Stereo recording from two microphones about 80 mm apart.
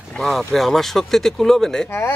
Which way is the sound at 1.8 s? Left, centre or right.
Left.